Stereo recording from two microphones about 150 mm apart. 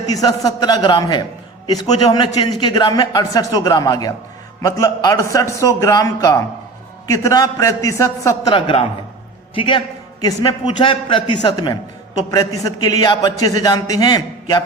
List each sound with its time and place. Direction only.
0.1 s a man's voice: 25° left (ahead or behind)
8.5 s a man's voice: 35° left (ahead or behind)